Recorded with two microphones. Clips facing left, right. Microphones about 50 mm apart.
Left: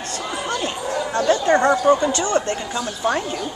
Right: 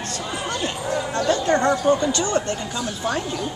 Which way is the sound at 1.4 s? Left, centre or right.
Centre.